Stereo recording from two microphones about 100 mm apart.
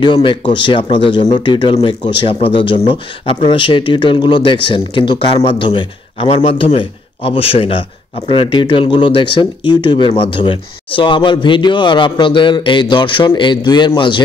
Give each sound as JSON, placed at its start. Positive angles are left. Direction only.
{"t": 0.0, "sound": "speech", "side_deg": 55}
{"t": 1.8, "sound": "speech", "side_deg": 80}